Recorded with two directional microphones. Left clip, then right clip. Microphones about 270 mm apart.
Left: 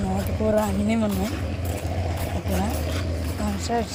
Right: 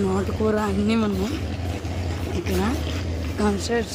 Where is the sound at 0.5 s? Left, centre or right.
Centre.